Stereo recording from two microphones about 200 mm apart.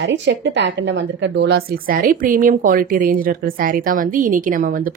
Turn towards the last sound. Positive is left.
turn(degrees=-45)  # may be behind; listen again after turning